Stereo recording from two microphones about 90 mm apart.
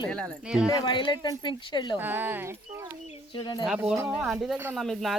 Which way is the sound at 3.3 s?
60° left (ahead or behind).